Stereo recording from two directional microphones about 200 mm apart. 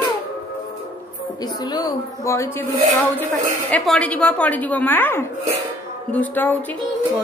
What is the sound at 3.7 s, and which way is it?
A woman's voice, 5° left (ahead or behind).